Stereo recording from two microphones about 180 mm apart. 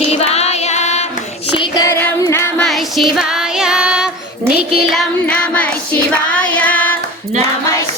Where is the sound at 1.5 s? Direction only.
20° left (ahead or behind).